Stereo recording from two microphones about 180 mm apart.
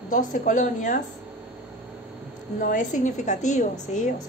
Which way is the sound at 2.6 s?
45° left (ahead or behind).